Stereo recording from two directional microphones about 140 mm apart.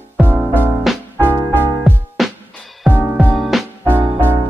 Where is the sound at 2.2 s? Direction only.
Centre (ahead or behind).